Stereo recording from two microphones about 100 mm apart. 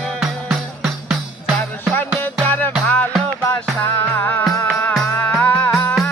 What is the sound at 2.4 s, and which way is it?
Music, 20° left (ahead or behind).